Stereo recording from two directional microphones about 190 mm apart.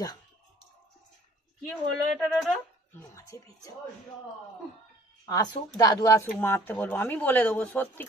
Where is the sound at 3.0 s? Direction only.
15° left (ahead or behind).